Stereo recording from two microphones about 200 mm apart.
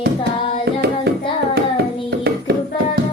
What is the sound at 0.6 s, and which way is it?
Hands, 55° right (ahead or behind).